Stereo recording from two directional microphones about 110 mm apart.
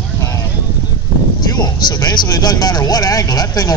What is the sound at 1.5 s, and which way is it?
Speech, 40° left (ahead or behind).